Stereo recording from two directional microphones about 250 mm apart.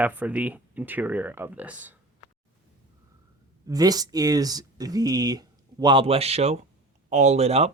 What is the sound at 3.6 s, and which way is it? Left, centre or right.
Speech, centre.